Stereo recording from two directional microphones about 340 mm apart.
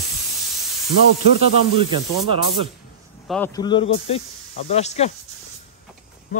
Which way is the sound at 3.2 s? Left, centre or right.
Centre.